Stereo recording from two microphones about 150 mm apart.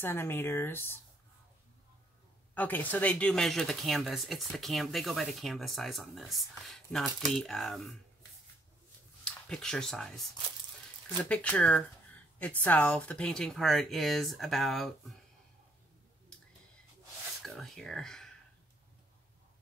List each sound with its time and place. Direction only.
0.0 s speech: 15° left (ahead or behind)
2.5 s speech: 10° left (ahead or behind)
9.2 s speech: 5° left (ahead or behind)
11.2 s speech: 10° left (ahead or behind)
17.4 s speech: centre (ahead or behind)